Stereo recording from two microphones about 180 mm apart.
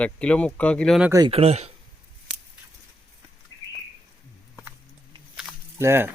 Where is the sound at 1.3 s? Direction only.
35° right (ahead or behind).